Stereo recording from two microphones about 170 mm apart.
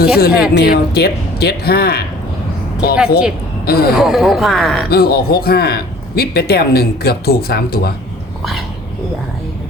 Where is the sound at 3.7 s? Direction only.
65° left (ahead or behind).